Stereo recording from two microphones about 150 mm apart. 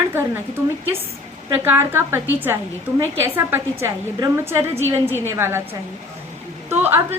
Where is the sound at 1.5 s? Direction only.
15° right (ahead or behind).